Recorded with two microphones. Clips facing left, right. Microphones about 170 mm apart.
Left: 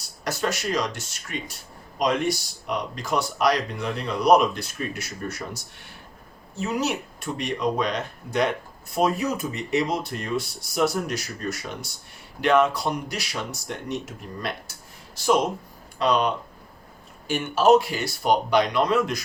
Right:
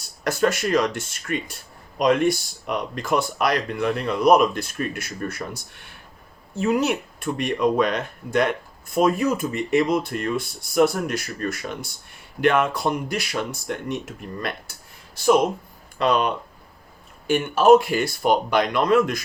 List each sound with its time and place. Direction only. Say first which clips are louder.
0.3 s speech: right 5 dB; 55° right (ahead or behind)
17.2 s speech: right 3 dB; 55° right (ahead or behind)